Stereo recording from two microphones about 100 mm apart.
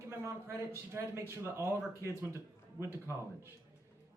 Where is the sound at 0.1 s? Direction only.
25° right (ahead or behind).